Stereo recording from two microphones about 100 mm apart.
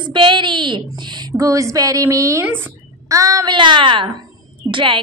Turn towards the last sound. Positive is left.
turn(degrees=-55)  # may be behind; listen again after turning